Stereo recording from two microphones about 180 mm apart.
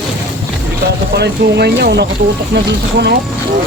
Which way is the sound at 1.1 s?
65° right (ahead or behind).